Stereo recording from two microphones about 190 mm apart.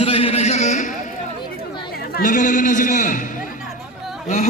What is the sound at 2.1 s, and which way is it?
A man's voice, 45° left (ahead or behind).